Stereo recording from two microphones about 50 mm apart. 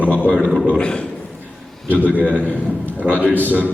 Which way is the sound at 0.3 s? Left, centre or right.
Right.